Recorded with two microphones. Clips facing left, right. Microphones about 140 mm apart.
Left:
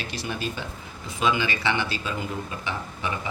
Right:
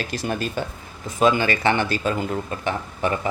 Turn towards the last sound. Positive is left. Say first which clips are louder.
# right 7 dB
turn(degrees=-50)  # may be behind; listen again after turning